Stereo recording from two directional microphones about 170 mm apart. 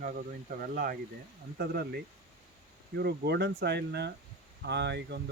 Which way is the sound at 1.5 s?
65° right (ahead or behind).